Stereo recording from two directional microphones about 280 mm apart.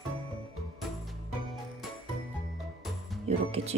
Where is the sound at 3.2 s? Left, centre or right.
Right.